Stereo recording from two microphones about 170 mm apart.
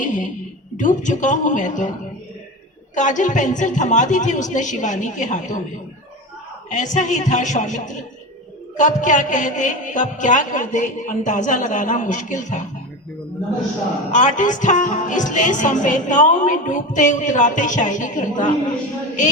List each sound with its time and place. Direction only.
0.0 s a sound: 50° left (ahead or behind)
0.8 s speech: 50° left (ahead or behind)
2.9 s speech: 45° left (ahead or behind)
6.7 s speech: 45° left (ahead or behind)
14.1 s speech: 50° left (ahead or behind)